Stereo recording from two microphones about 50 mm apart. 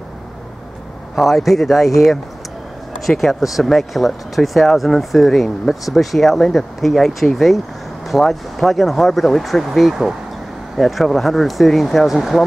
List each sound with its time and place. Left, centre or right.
1.1 s speech: centre
3.1 s speech: centre